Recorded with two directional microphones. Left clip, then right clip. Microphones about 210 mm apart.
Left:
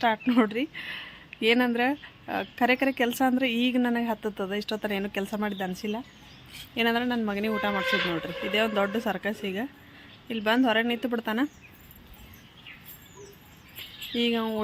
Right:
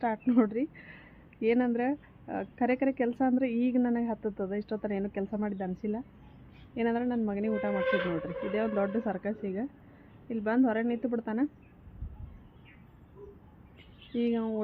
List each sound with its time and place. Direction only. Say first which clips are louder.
0.0 s speech: left 4 dB; 10° left (ahead or behind)
6.7 s speech: left 5 dB; 10° left (ahead or behind)
14.2 s speech: left 4 dB; 15° left (ahead or behind)